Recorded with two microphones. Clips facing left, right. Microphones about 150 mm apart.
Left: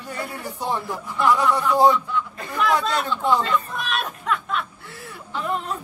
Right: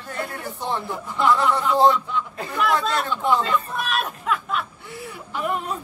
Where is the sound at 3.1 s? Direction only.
15° right (ahead or behind).